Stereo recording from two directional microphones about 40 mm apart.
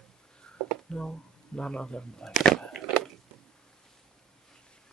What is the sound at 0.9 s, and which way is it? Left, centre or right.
Speech, left.